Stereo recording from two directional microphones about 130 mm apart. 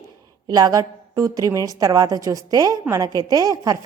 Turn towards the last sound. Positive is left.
turn(degrees=-25)  # may be behind; listen again after turning